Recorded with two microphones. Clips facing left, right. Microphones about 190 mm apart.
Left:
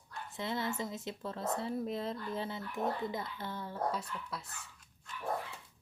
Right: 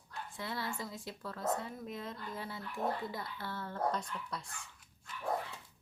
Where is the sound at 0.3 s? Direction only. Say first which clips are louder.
Left 4 dB; 20° left (ahead or behind); by 4.4 s 5° left (ahead or behind).